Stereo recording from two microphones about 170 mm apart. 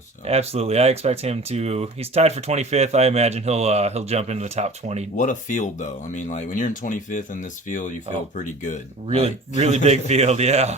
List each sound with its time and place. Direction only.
0.3 s speech: 35° right (ahead or behind)
5.1 s speech: 50° left (ahead or behind)
9.0 s speech: 35° right (ahead or behind)